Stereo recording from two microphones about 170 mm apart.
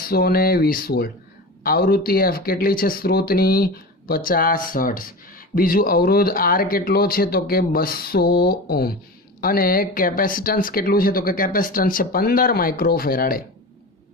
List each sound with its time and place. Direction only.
0.0 s speech: 65° left (ahead or behind)